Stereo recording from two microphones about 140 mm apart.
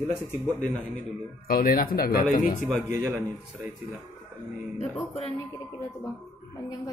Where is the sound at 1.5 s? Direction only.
90° left.